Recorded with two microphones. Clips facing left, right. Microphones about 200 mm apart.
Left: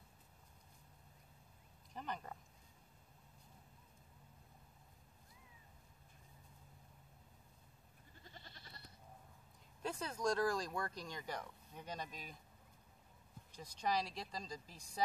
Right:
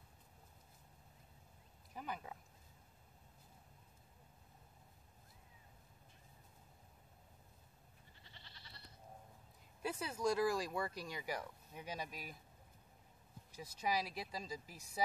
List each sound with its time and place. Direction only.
2.0 s speech: 5° right (ahead or behind)
8.2 s goat: 45° left (ahead or behind)
9.8 s speech: 10° right (ahead or behind)
13.6 s speech: 5° right (ahead or behind)